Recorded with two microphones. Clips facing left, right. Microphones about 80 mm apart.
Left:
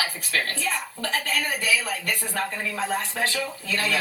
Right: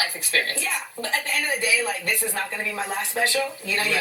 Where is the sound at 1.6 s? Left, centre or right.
Right.